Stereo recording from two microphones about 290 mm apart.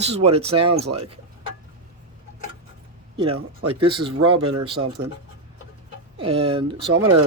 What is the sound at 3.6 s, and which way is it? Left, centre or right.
Speech, right.